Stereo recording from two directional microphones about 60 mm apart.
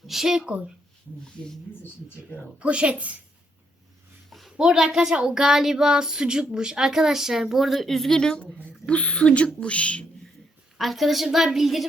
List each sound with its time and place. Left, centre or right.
0.1 s speech: centre
2.6 s speech: centre
4.3 s a sound: centre
4.5 s a woman's voice: centre; by 10.1 s left
10.8 s a woman's voice: centre